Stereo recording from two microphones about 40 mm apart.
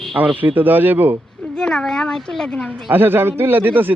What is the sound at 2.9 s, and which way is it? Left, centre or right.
A man's voice, right.